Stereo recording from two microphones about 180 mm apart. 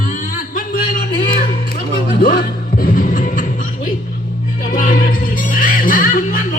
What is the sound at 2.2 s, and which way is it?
Music, 50° left (ahead or behind).